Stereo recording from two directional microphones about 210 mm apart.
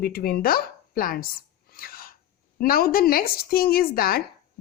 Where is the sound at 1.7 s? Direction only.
45° left (ahead or behind).